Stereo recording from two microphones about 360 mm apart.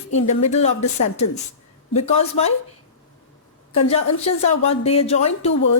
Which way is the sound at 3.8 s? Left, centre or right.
Centre.